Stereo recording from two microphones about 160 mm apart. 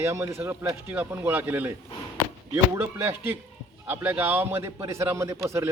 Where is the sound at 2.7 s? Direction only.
15° right (ahead or behind).